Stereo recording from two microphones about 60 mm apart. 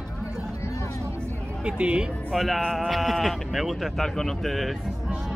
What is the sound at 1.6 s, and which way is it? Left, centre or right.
Speech, centre.